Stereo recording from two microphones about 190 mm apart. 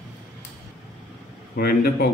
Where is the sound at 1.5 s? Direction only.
55° left (ahead or behind).